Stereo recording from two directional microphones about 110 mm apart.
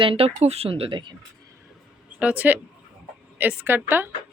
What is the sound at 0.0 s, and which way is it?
Speech, 60° right (ahead or behind).